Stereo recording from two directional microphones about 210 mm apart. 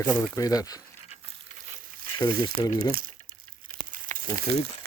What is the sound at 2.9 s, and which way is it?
Speech, 45° right (ahead or behind).